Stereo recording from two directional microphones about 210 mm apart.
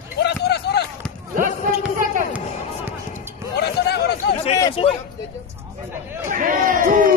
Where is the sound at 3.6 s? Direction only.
50° left (ahead or behind).